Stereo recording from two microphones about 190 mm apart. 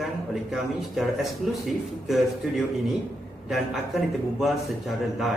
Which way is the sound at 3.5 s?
Centre (ahead or behind).